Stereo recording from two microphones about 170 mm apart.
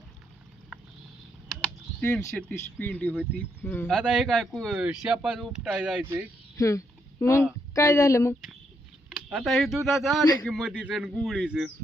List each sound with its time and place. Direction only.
1.5 s speech: 5° left (ahead or behind)
3.9 s speech: centre (ahead or behind)
6.6 s a sound: 20° left (ahead or behind)
7.7 s a woman's voice: 20° left (ahead or behind)
9.1 s speech: centre (ahead or behind)